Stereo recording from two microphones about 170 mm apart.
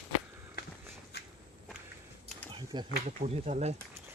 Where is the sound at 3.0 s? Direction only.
45° right (ahead or behind).